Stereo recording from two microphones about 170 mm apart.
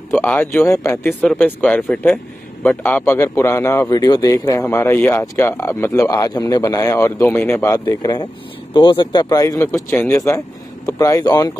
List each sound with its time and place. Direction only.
0.1 s speech: 10° left (ahead or behind)